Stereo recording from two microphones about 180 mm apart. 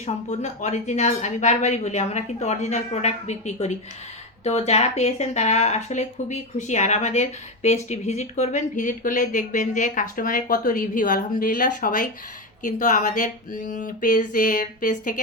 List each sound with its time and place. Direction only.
0.0 s speech: 40° left (ahead or behind)